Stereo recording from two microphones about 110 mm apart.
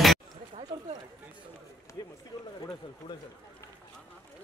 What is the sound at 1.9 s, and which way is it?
Run, 30° left (ahead or behind).